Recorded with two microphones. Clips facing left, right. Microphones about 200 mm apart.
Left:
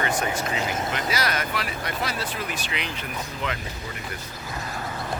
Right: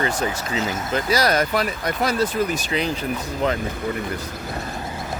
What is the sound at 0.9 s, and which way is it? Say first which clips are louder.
Speech: right 12 dB; 40° right (ahead or behind).